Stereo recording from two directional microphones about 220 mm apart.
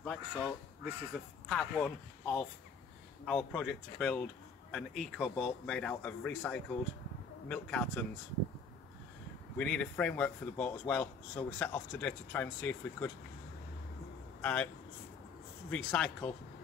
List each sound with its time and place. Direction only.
0.0 s speech: 5° left (ahead or behind)
9.6 s speech: 5° left (ahead or behind)
14.4 s speech: 5° left (ahead or behind)
15.7 s speech: 5° left (ahead or behind)